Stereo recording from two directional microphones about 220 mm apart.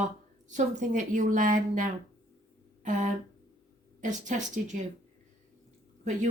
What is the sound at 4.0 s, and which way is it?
Speech, 35° right (ahead or behind).